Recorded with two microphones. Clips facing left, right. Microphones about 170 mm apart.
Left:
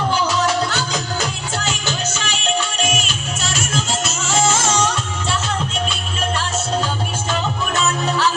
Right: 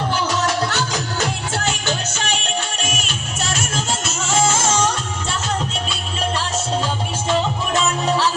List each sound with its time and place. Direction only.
1.6 s music: 60° right (ahead or behind)